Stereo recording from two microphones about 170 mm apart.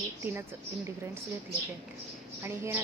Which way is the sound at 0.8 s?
15° right (ahead or behind).